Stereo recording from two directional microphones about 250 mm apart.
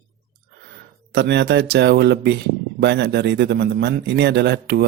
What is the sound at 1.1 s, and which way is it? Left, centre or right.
Speech, right.